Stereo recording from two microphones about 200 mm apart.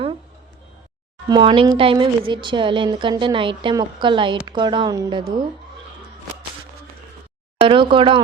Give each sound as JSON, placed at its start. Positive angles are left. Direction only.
{"t": 1.3, "sound": "a woman's voice", "side_deg": -25}
{"t": 7.6, "sound": "a woman's voice", "side_deg": -25}